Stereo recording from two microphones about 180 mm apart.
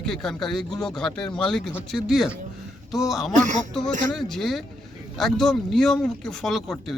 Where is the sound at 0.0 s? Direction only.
5° left (ahead or behind).